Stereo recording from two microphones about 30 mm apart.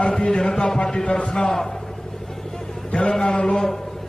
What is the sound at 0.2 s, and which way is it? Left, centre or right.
Speech, left.